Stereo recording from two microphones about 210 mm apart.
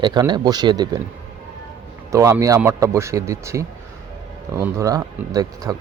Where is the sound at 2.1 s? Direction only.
15° right (ahead or behind).